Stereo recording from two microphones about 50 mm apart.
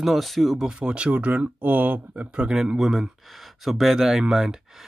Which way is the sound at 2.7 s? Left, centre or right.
Centre.